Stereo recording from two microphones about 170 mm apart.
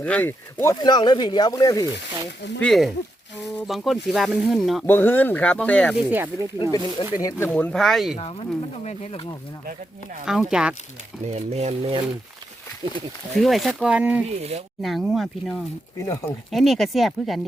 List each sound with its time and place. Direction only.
0.0 s speech: 10° left (ahead or behind)
2.6 s speech: centre (ahead or behind)
4.9 s speech: 10° left (ahead or behind)
6.1 s speech: 10° right (ahead or behind)
6.6 s speech: 25° left (ahead or behind); by 8.1 s centre (ahead or behind)
8.2 s speech: 35° left (ahead or behind)
10.2 s speech: 5° right (ahead or behind)
11.3 s speech: 40° right (ahead or behind)
13.4 s speech: centre (ahead or behind)
16.0 s speech: 20° left (ahead or behind)
16.5 s speech: centre (ahead or behind)